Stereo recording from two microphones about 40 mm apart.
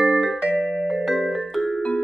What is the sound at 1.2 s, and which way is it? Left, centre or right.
Music, centre.